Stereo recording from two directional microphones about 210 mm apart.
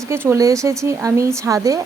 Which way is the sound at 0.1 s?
10° right (ahead or behind).